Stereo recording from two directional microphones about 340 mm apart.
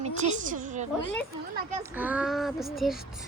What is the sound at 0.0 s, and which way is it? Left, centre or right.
Speech, right.